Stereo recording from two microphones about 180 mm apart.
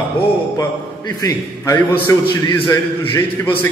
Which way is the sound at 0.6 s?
20° left (ahead or behind).